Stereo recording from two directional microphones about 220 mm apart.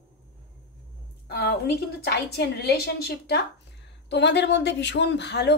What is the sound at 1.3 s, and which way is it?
Speech, 45° left (ahead or behind).